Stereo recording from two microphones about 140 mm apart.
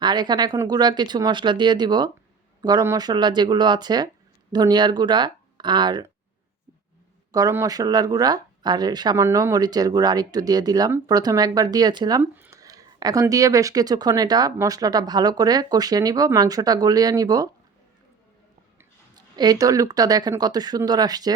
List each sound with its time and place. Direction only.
0.0 s speech: 30° right (ahead or behind)
7.3 s speech: 25° right (ahead or behind)
12.2 s speech: 15° right (ahead or behind)
19.1 s speech: 30° right (ahead or behind)